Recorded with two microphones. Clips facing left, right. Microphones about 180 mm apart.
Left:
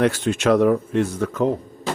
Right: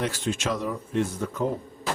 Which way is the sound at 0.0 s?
65° left (ahead or behind).